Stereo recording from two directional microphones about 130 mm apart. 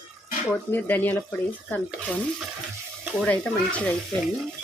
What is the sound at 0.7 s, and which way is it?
Speech, 15° left (ahead or behind).